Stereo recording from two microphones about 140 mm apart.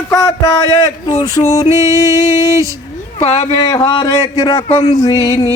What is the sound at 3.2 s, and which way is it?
Speech, 50° left (ahead or behind).